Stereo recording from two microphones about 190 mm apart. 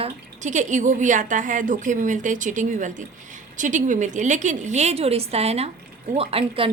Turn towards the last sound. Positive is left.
turn(degrees=-30)  # may be behind; listen again after turning